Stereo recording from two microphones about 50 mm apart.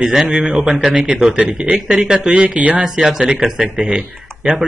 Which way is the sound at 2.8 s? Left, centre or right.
Centre.